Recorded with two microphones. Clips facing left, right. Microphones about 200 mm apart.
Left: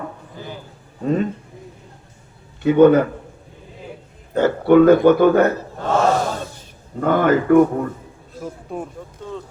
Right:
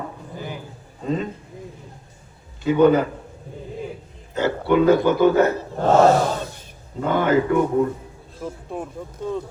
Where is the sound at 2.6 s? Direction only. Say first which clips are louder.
Left 4 dB; 60° left (ahead or behind).